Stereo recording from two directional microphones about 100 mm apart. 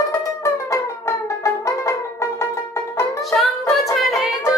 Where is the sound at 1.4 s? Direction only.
30° left (ahead or behind).